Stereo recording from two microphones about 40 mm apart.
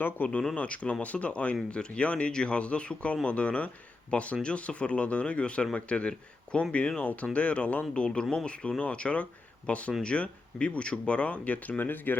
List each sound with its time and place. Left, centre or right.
0.2 s speech: left
0.5 s speech: left
7.9 s speech: left
11.8 s speech: left